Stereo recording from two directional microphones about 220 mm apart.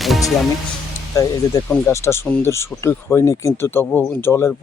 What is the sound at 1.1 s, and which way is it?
Speech, 15° left (ahead or behind).